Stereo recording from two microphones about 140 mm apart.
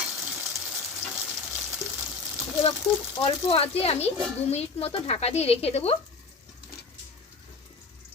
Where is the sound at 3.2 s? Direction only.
40° left (ahead or behind).